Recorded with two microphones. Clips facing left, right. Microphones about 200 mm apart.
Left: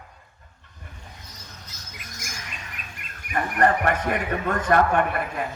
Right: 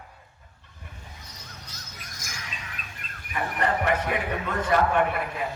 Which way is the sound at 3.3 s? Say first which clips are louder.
Left 5 dB; 55° left (ahead or behind).